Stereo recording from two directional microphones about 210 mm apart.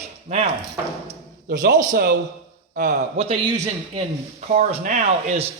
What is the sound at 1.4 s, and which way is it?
A man's voice, 45° right (ahead or behind).